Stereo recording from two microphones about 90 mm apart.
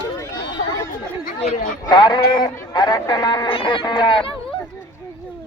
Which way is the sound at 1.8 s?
50° left (ahead or behind).